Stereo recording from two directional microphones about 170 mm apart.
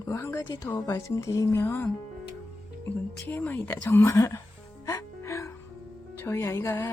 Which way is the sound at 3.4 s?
10° left (ahead or behind).